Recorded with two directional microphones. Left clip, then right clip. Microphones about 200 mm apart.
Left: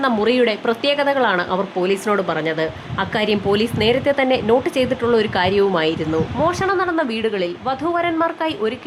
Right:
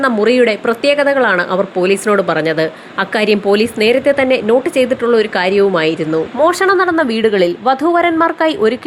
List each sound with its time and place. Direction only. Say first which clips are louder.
0.0 s speech: right 5 dB; 15° right (ahead or behind)
6.4 s a woman's voice: right 8 dB; 25° right (ahead or behind)